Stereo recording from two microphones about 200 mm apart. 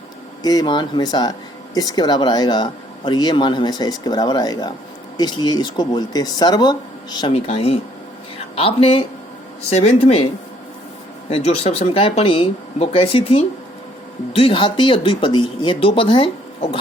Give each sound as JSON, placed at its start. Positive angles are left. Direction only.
{"t": 0.4, "sound": "speech", "side_deg": 20}
{"t": 11.3, "sound": "speech", "side_deg": 30}